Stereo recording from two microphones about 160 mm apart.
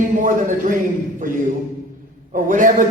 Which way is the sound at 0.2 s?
55° right (ahead or behind).